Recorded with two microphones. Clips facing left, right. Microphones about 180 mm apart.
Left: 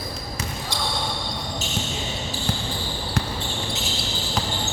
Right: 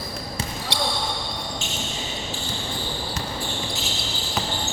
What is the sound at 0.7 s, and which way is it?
Basketball bounce, 70° right (ahead or behind).